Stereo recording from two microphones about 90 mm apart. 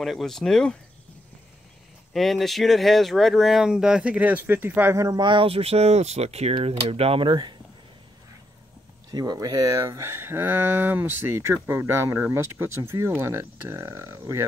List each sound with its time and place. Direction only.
0.0 s speech: centre (ahead or behind)
2.1 s speech: centre (ahead or behind); by 5.0 s 25° right (ahead or behind)
5.0 s speech: 55° right (ahead or behind)
9.1 s speech: 45° right (ahead or behind)